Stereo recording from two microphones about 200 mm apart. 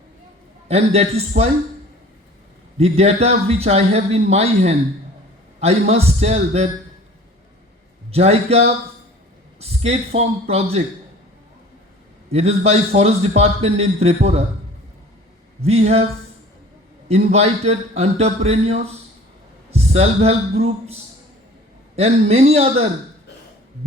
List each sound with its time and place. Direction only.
0.7 s a man's voice: 30° right (ahead or behind)
2.7 s a man's voice: 30° right (ahead or behind)
8.1 s a man's voice: 30° right (ahead or behind)
12.3 s a man's voice: 30° right (ahead or behind)
15.6 s a man's voice: 30° right (ahead or behind)
17.1 s a man's voice: 30° right (ahead or behind)